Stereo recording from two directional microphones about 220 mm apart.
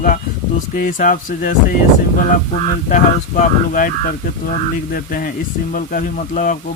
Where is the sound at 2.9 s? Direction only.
35° left (ahead or behind).